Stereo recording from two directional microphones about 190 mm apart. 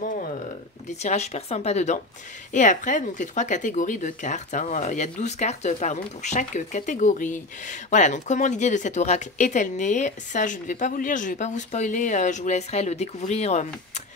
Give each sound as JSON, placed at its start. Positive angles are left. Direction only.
{"t": 0.9, "sound": "speech", "side_deg": 35}